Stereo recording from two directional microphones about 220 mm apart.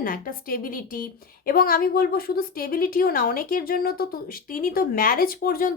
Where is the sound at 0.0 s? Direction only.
40° left (ahead or behind).